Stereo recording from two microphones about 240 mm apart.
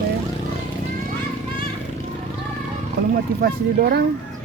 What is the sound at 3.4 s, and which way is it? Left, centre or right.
Speech, right.